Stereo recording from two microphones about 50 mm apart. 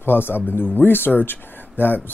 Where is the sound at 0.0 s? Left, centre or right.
Left.